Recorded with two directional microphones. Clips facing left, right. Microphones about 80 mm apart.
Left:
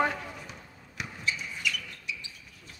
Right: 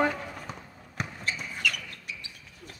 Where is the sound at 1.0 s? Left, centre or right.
Right.